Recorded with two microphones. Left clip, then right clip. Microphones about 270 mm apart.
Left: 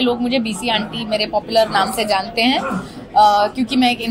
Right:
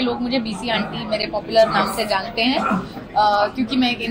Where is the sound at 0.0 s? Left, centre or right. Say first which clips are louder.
Left 4 dB; left.